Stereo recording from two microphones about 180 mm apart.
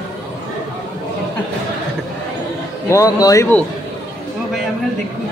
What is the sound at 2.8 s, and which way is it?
Speech, 20° left (ahead or behind).